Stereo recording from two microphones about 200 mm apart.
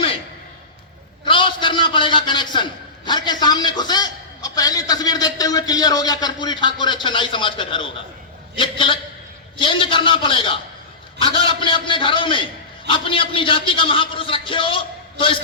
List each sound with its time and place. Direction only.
1.2 s a man's voice: 25° left (ahead or behind)